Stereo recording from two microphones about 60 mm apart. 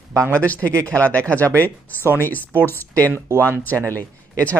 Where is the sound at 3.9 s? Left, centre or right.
Left.